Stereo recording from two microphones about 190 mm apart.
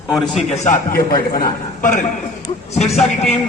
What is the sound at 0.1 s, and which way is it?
Speech, centre (ahead or behind).